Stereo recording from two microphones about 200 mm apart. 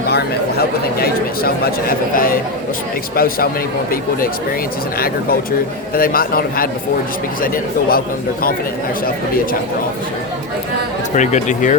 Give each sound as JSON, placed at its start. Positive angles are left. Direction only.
{"t": 0.9, "sound": "speech", "side_deg": 50}
{"t": 4.9, "sound": "speech", "side_deg": 50}
{"t": 11.1, "sound": "speech", "side_deg": 35}